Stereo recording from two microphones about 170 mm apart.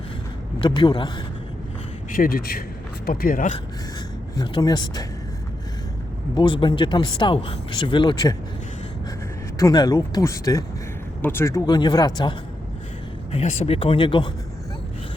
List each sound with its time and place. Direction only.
0.6 s speech: 25° left (ahead or behind)
2.1 s a man's voice: 55° left (ahead or behind)
4.4 s speech: 25° left (ahead or behind)
6.3 s speech: 30° left (ahead or behind)
9.6 s speech: 20° left (ahead or behind)
13.3 s speech: 40° left (ahead or behind)